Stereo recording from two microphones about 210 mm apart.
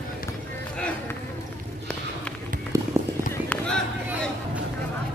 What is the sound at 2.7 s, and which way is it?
Music, 15° right (ahead or behind).